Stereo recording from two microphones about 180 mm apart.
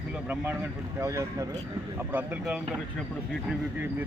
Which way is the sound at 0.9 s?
15° right (ahead or behind).